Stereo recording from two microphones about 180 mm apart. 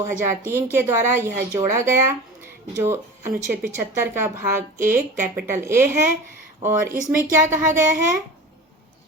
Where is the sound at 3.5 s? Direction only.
10° right (ahead or behind).